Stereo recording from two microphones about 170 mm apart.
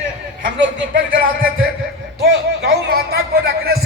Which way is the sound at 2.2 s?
70° right (ahead or behind).